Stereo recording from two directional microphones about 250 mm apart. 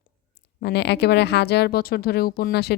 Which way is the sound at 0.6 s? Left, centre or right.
Left.